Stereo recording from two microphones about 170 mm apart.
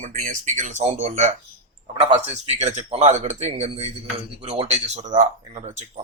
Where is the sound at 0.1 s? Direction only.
45° right (ahead or behind).